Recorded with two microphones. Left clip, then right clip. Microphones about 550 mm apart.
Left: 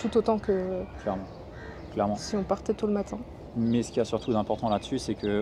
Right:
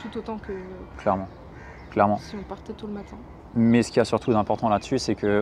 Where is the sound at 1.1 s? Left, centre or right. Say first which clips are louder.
Right 9 dB; right.